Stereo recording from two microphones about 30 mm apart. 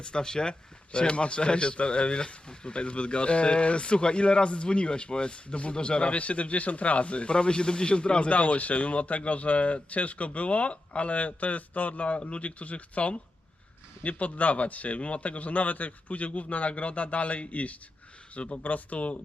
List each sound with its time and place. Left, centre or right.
0.0 s speech: left
0.9 s speech: left
8.3 s speech: left